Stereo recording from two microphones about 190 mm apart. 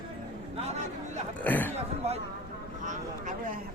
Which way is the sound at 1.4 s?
10° left (ahead or behind).